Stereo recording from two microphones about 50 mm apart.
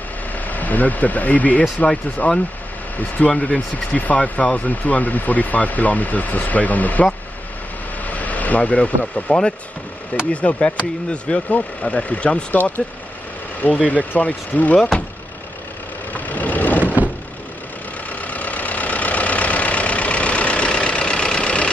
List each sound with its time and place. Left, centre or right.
0.5 s speech: left
8.1 s speech: left
12.5 s speech: left
13.8 s speech: left
16.1 s vehicle: left
16.8 s vehicle: right
18.1 s vehicle: left